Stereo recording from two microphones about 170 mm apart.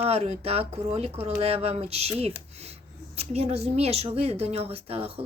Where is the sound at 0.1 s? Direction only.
35° right (ahead or behind).